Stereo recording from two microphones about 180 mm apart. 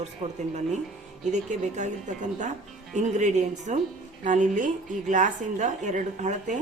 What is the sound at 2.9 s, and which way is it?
A woman's voice, 40° right (ahead or behind).